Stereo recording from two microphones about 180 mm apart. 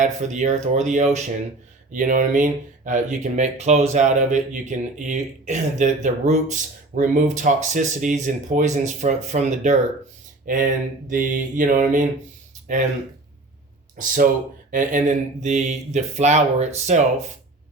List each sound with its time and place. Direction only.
0.0 s speech: 40° right (ahead or behind)
14.7 s speech: 45° right (ahead or behind)